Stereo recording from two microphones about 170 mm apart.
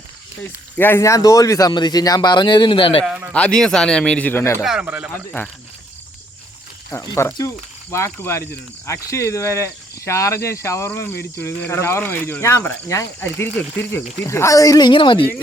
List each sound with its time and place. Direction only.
0.4 s speech: 10° left (ahead or behind); by 3.0 s 30° left (ahead or behind)
3.3 s speech: 5° left (ahead or behind)
4.6 s speech: 5° right (ahead or behind)
6.9 s speech: 20° left (ahead or behind)